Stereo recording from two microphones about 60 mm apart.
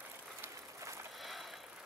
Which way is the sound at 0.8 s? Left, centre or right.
Right.